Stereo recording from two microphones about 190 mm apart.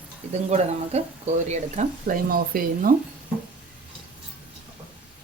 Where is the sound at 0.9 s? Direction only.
35° right (ahead or behind).